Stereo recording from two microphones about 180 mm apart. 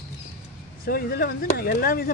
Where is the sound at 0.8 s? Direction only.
55° left (ahead or behind).